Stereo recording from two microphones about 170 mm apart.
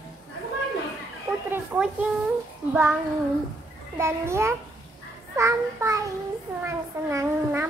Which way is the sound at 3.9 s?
15° right (ahead or behind).